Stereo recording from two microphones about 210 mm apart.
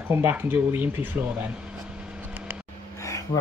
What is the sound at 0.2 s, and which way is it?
Speech, 10° right (ahead or behind).